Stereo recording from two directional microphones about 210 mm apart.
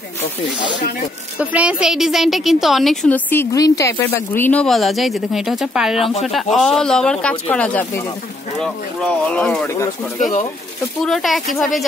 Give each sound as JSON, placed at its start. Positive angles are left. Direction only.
{"t": 1.4, "sound": "a woman's voice", "side_deg": -5}
{"t": 5.9, "sound": "speech", "side_deg": 30}
{"t": 6.2, "sound": "a woman's voice", "side_deg": 0}